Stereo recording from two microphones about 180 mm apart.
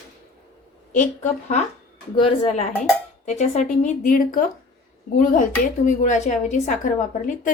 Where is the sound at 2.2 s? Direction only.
30° left (ahead or behind).